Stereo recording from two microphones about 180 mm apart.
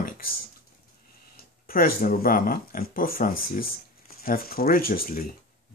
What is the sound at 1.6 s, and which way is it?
Speech, 55° left (ahead or behind).